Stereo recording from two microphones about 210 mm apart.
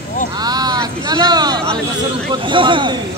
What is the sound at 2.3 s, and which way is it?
Speech, 25° right (ahead or behind).